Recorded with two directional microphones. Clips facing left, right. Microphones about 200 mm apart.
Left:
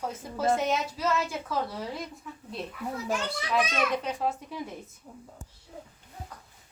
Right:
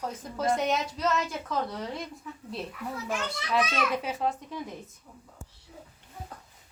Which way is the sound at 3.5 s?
5° right (ahead or behind).